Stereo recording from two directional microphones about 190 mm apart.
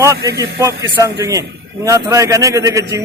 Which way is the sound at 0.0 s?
15° right (ahead or behind).